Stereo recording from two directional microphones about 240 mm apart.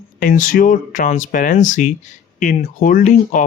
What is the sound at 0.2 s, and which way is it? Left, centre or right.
Speech, left.